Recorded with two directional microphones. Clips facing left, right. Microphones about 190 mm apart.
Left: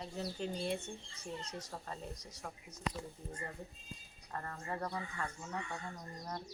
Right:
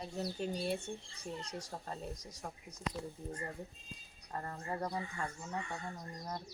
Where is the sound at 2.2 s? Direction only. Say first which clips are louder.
Right 1 dB; 10° right (ahead or behind).